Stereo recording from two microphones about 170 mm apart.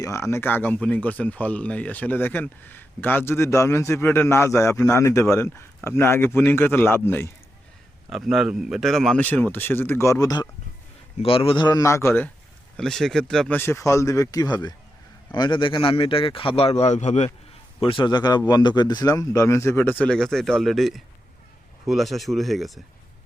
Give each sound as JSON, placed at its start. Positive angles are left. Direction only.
{"t": 0.0, "sound": "speech", "side_deg": 20}
{"t": 8.1, "sound": "speech", "side_deg": 0}
{"t": 11.2, "sound": "speech", "side_deg": 35}
{"t": 13.6, "sound": "a man's voice", "side_deg": 15}